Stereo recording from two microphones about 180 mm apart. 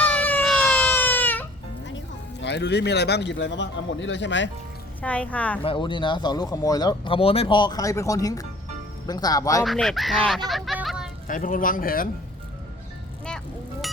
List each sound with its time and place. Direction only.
0.0 s baby cry: 5° left (ahead or behind)
2.4 s a man's voice: 75° left (ahead or behind)
5.0 s a woman's voice: 5° left (ahead or behind)
5.6 s speech: 25° left (ahead or behind)
9.6 s speech: centre (ahead or behind)
11.3 s speech: 50° left (ahead or behind)
13.8 s music: centre (ahead or behind)